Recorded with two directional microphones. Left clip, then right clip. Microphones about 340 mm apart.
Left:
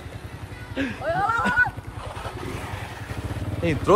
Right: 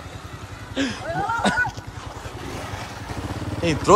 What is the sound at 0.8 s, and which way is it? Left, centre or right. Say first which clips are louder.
Speech: right 3 dB; centre.